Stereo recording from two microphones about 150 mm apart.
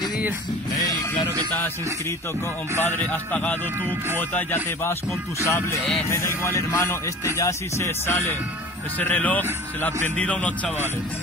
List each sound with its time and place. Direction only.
1.5 s speech: 15° left (ahead or behind)